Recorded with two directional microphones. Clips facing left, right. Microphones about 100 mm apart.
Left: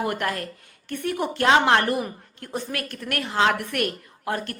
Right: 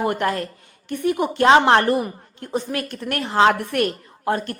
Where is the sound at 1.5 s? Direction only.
30° right (ahead or behind).